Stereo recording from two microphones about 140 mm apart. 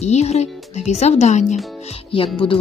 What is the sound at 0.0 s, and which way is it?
Speech, 50° left (ahead or behind).